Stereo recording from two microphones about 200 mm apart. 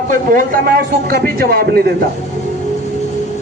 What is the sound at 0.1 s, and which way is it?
A man's voice, 45° right (ahead or behind).